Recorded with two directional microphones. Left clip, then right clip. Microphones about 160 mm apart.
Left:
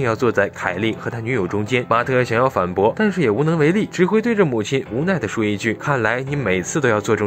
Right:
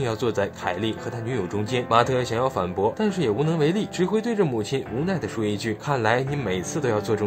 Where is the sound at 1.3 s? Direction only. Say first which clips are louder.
Left 6 dB; 30° left (ahead or behind).